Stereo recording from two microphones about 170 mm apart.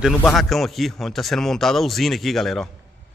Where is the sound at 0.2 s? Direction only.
Centre (ahead or behind).